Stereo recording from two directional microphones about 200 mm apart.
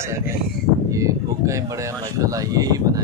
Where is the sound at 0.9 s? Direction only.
15° right (ahead or behind).